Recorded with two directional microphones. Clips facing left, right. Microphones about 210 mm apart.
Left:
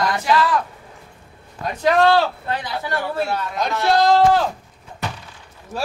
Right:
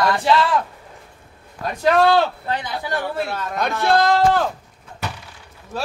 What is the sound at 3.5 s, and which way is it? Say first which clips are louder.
Speech: right 1 dB; 60° right (ahead or behind).